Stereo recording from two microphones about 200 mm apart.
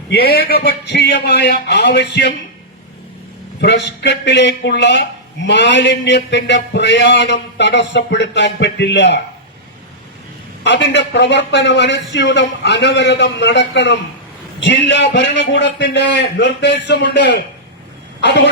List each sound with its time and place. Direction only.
0.1 s a man's voice: 55° left (ahead or behind)
3.6 s a man's voice: 60° left (ahead or behind)
10.6 s a man's voice: 60° left (ahead or behind)